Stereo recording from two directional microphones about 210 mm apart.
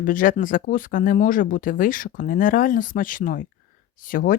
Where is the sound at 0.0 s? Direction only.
40° left (ahead or behind).